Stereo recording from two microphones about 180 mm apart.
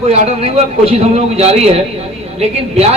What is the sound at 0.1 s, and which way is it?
A man's voice, 35° right (ahead or behind).